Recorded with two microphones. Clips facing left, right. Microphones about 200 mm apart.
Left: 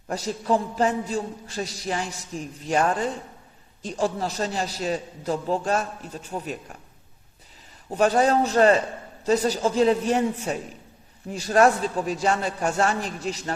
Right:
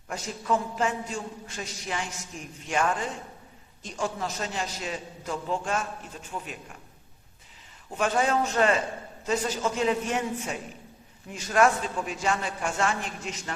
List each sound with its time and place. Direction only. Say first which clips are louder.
0.1 s a man's voice: left 5 dB; 35° left (ahead or behind)
7.9 s a man's voice: left 6 dB; 40° left (ahead or behind)